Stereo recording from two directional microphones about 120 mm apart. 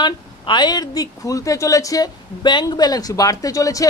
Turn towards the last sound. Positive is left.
turn(degrees=30)  # may be behind; listen again after turning